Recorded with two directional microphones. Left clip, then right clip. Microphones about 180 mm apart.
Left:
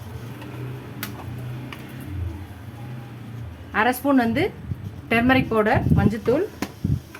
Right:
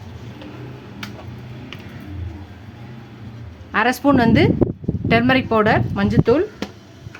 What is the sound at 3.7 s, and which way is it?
A woman's voice, 45° right (ahead or behind).